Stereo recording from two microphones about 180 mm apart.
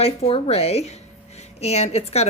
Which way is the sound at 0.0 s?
30° left (ahead or behind).